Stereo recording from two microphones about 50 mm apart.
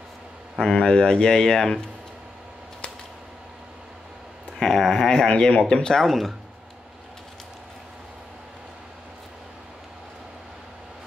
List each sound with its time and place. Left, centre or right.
0.7 s speech: centre
4.6 s speech: centre
6.0 s speech: centre